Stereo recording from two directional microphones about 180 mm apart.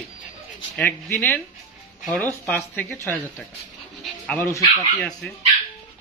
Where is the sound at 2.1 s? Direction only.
10° left (ahead or behind).